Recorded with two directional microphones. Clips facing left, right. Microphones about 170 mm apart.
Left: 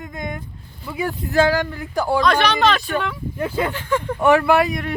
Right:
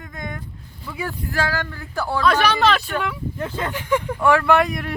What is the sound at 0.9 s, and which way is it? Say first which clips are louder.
Speech: left 4 dB; 15° left (ahead or behind).